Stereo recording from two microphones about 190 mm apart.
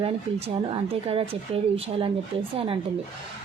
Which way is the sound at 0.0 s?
30° right (ahead or behind).